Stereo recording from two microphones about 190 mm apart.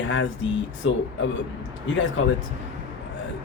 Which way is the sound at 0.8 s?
90° left.